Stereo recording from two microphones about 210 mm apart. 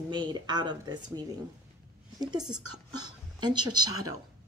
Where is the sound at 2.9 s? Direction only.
20° right (ahead or behind).